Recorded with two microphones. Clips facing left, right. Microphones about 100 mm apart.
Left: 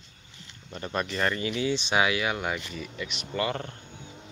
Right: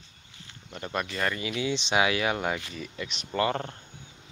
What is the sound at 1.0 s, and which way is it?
Speech, 30° left (ahead or behind).